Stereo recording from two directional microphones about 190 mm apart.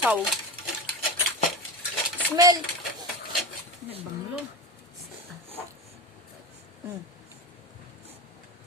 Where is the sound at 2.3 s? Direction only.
20° right (ahead or behind).